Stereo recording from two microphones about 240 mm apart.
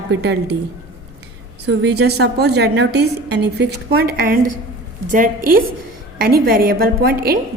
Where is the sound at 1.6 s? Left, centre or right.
Right.